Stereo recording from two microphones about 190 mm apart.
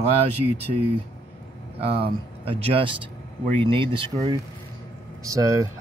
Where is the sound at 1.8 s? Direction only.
30° right (ahead or behind).